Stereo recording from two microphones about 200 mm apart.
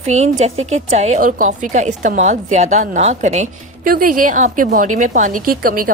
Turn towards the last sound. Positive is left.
turn(degrees=-45)  # may be behind; listen again after turning